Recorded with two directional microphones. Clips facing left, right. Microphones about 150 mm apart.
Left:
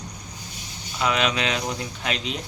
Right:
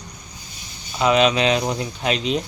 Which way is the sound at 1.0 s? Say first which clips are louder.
Right 7 dB; 25° right (ahead or behind).